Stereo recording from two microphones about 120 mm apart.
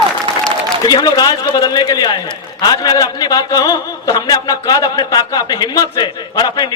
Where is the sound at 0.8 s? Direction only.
35° left (ahead or behind).